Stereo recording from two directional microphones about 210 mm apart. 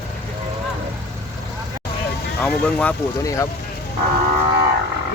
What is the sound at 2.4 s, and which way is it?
Speech, 5° left (ahead or behind).